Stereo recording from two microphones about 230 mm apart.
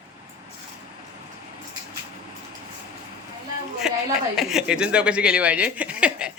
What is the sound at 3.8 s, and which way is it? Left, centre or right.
Speech, centre.